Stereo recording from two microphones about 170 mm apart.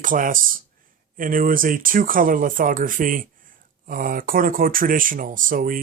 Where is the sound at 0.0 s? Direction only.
50° right (ahead or behind).